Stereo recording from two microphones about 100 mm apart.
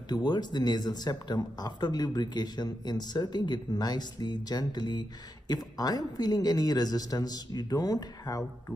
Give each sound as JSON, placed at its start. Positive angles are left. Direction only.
{"t": 0.1, "sound": "a man's voice", "side_deg": 45}